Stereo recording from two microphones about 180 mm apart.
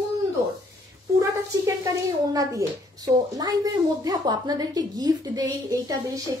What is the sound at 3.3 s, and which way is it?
A woman's voice, 20° right (ahead or behind).